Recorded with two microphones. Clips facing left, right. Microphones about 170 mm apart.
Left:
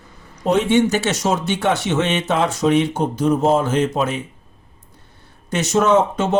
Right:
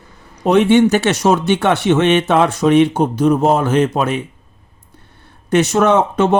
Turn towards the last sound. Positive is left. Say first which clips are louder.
# right 3 dB
turn(degrees=-60)  # may be behind; listen again after turning